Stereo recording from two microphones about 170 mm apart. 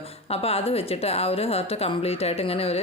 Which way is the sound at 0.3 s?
35° left (ahead or behind).